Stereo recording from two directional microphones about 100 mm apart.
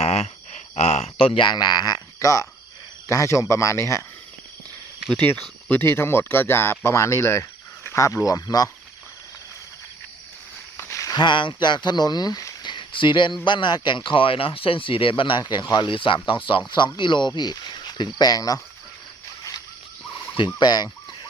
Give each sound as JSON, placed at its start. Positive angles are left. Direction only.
{"t": 0.0, "sound": "a sound", "side_deg": 90}
{"t": 0.8, "sound": "speech", "side_deg": 90}
{"t": 2.1, "sound": "speech", "side_deg": 35}
{"t": 5.1, "sound": "speech", "side_deg": 15}
{"t": 10.8, "sound": "a sound", "side_deg": 25}
{"t": 11.2, "sound": "speech", "side_deg": 55}
{"t": 12.6, "sound": "a sound", "side_deg": 55}
{"t": 13.4, "sound": "speech", "side_deg": 50}
{"t": 20.3, "sound": "speech", "side_deg": 50}